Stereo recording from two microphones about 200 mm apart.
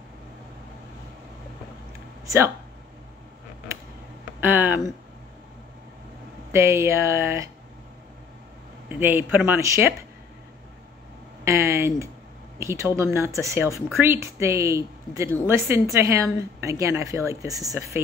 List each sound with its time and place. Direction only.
2.2 s speech: 15° right (ahead or behind)
4.4 s speech: 10° right (ahead or behind)
6.5 s a woman's voice: 15° right (ahead or behind)
8.8 s a woman's voice: 10° right (ahead or behind)
11.4 s a woman's voice: 15° right (ahead or behind)